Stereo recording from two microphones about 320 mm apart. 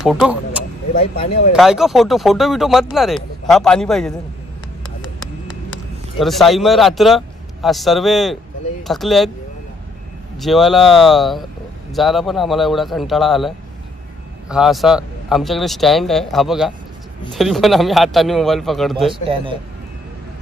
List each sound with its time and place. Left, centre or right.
0.0 s speech: centre
6.1 s speech: centre
10.3 s speech: centre
14.5 s speech: centre
19.2 s a man's voice: centre